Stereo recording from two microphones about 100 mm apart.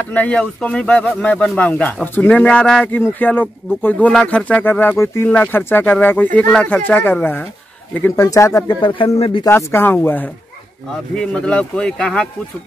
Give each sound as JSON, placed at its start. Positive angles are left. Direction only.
{"t": 0.1, "sound": "speech", "side_deg": 15}
{"t": 8.2, "sound": "speech", "side_deg": 30}
{"t": 8.6, "sound": "speech", "side_deg": 55}
{"t": 9.5, "sound": "speech", "side_deg": 25}